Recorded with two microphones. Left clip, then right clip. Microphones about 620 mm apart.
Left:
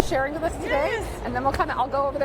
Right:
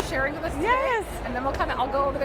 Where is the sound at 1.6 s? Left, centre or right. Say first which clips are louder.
Left 1 dB; left.